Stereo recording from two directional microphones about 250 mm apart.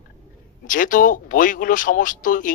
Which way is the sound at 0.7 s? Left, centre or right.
Left.